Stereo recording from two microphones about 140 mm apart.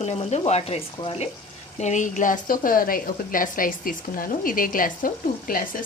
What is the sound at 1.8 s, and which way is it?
A woman's voice, 60° left (ahead or behind).